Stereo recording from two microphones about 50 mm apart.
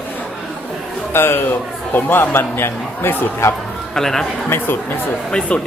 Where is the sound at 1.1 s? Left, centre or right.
Left.